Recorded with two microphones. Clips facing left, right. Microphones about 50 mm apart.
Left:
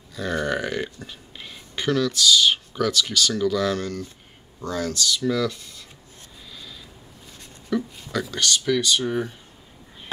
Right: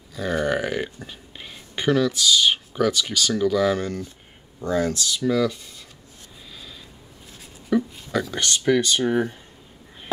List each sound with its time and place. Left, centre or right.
0.1 s speech: centre
7.7 s a sound: centre
8.5 s speech: right